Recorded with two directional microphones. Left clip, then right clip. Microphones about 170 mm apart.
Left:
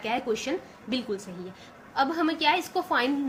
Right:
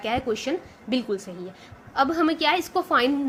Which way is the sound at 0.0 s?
35° right (ahead or behind).